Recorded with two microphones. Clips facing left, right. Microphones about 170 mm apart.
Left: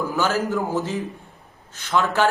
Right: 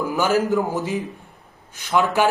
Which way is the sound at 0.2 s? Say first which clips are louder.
Right 4 dB; 15° right (ahead or behind).